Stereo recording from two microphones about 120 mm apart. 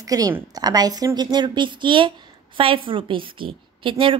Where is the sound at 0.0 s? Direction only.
30° right (ahead or behind).